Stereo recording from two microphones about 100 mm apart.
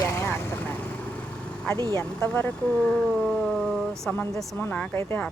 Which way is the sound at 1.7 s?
45° right (ahead or behind).